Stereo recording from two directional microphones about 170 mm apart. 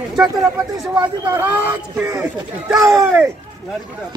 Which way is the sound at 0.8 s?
10° right (ahead or behind).